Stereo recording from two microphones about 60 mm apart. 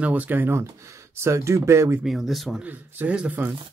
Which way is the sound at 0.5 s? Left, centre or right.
Right.